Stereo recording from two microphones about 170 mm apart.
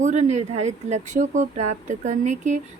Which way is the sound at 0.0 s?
45° right (ahead or behind).